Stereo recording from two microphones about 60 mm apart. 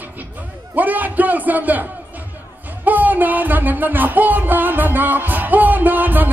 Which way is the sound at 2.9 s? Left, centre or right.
Right.